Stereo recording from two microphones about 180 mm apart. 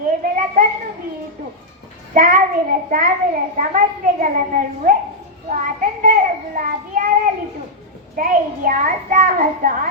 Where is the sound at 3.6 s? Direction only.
45° right (ahead or behind).